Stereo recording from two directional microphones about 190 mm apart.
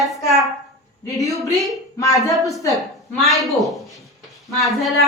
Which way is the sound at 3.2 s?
Centre (ahead or behind).